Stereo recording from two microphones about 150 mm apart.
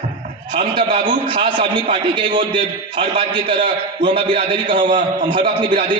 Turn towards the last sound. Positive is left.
turn(degrees=-35)  # may be behind; listen again after turning